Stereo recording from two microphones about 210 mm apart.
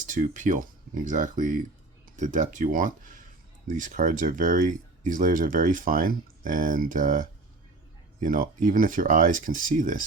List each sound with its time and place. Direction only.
0.0 s speech: 40° right (ahead or behind)